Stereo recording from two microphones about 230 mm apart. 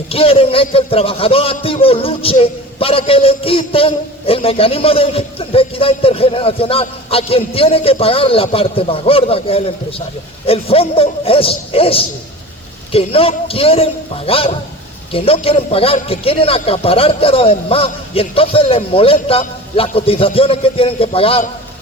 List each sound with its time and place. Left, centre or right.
0.1 s a man's voice: left